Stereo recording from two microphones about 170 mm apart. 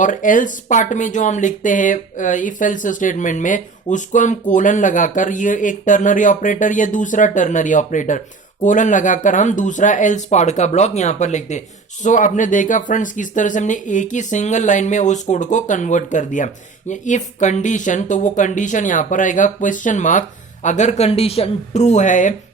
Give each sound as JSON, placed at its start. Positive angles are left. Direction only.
{"t": 0.0, "sound": "speech", "side_deg": 50}